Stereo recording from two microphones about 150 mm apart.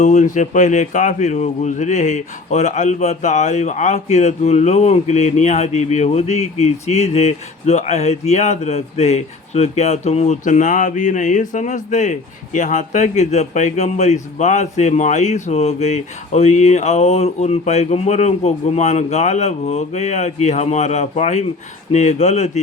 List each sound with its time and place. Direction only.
0.0 s speech: 55° left (ahead or behind)